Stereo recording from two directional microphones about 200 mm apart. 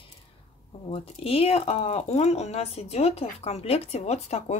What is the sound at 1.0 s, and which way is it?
Speech, 30° left (ahead or behind).